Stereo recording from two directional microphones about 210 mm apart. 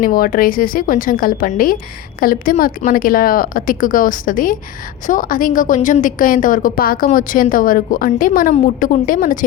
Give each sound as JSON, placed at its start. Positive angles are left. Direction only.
{"t": 0.0, "sound": "a woman's voice", "side_deg": 40}